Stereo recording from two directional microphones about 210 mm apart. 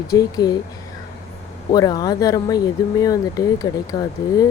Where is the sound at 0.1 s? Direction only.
20° left (ahead or behind).